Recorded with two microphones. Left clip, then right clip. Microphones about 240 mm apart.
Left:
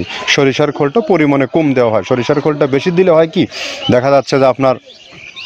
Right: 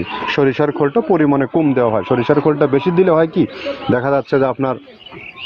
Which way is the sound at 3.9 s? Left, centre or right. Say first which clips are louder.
Left 5 dB; left.